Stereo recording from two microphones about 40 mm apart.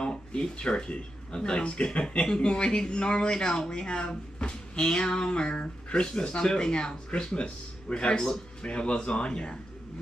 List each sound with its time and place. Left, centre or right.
0.0 s speech: left